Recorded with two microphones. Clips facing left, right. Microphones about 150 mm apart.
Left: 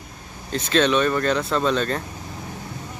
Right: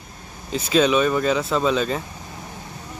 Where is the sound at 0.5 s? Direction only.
10° right (ahead or behind).